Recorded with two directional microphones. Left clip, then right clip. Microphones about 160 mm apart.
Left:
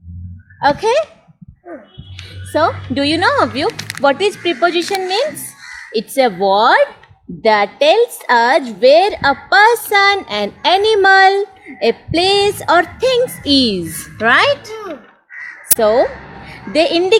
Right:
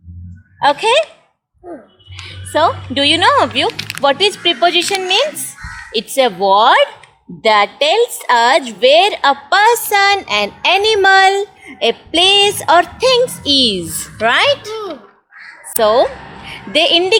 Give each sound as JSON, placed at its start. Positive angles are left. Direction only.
{"t": 0.6, "sound": "speech", "side_deg": 40}
{"t": 2.2, "sound": "speech", "side_deg": 45}
{"t": 15.8, "sound": "speech", "side_deg": 45}